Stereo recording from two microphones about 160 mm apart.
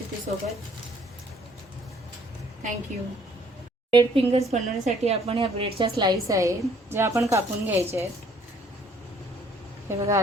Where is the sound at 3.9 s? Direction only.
30° right (ahead or behind); by 8.1 s 15° right (ahead or behind).